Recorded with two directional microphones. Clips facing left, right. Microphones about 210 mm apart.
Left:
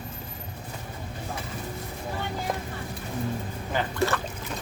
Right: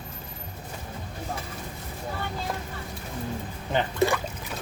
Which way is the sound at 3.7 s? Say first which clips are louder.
Right 3 dB; 15° right (ahead or behind).